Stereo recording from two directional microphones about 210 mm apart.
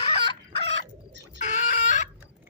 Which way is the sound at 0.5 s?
30° left (ahead or behind).